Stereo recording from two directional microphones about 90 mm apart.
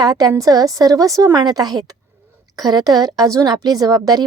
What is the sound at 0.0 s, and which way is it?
A woman's voice, 45° right (ahead or behind).